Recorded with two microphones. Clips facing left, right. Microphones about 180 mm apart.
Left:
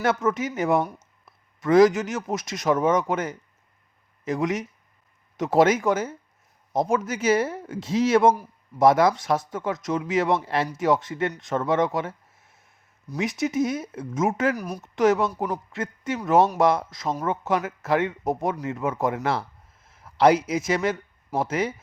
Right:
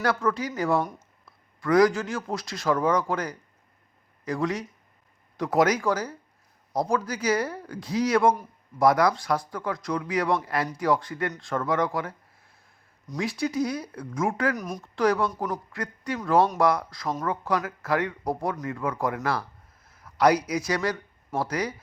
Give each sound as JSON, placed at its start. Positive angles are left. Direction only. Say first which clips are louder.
{"t": 0.0, "sound": "speech", "louder": "left 2 dB", "side_deg": 20}
{"t": 14.5, "sound": "speech", "louder": "left 1 dB", "side_deg": 5}
{"t": 14.9, "sound": "a man's voice", "louder": "left 3 dB", "side_deg": 20}